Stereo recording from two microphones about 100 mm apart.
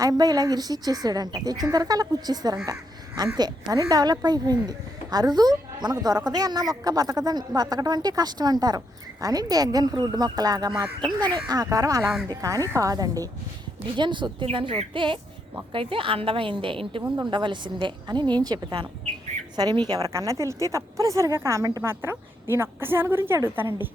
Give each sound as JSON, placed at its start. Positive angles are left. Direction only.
{"t": 0.0, "sound": "a woman's voice", "side_deg": -40}
{"t": 13.9, "sound": "a woman's voice", "side_deg": -50}
{"t": 14.4, "sound": "a woman's voice", "side_deg": -65}
{"t": 20.1, "sound": "a woman's voice", "side_deg": -30}